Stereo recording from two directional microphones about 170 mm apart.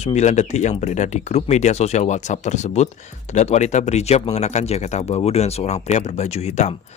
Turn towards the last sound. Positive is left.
turn(degrees=40)  # may be behind; listen again after turning